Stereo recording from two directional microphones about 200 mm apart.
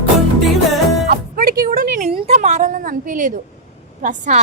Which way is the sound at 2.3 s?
35° right (ahead or behind).